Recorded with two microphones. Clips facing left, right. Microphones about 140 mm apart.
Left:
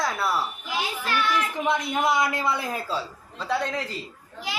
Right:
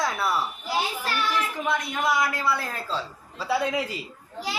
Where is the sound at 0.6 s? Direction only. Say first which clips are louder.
Right 2 dB; 35° right (ahead or behind).